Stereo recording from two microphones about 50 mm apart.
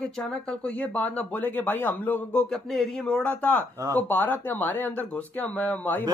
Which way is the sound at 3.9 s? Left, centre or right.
Left.